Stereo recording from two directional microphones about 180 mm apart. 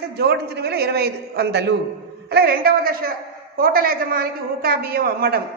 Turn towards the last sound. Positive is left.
turn(degrees=-55)  # may be behind; listen again after turning